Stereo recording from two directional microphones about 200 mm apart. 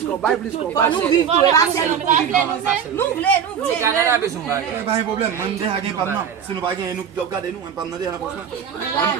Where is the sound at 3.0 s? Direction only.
5° left (ahead or behind).